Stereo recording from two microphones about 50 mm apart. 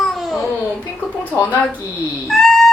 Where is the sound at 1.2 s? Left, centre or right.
Left.